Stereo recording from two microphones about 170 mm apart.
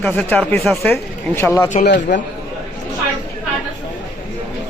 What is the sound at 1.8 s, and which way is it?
Speech, 90° left.